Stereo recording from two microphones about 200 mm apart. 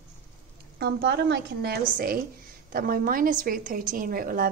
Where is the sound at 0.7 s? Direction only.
55° right (ahead or behind).